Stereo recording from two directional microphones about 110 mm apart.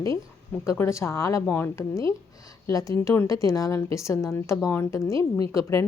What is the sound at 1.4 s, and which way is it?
Speech, 15° left (ahead or behind).